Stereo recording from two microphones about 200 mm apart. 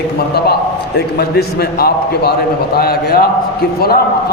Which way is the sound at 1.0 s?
55° left (ahead or behind).